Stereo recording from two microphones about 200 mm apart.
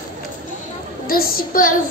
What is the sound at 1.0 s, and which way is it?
Speech, 45° left (ahead or behind).